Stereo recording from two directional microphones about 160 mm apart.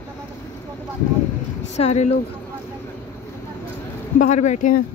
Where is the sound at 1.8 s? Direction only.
45° left (ahead or behind).